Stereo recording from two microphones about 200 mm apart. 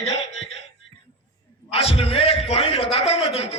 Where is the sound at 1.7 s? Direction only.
30° left (ahead or behind).